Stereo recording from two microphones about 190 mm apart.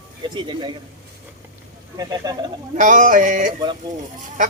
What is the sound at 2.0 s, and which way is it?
Speech, 20° right (ahead or behind).